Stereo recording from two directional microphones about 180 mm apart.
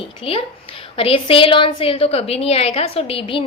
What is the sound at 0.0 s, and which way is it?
A woman's voice, 30° left (ahead or behind).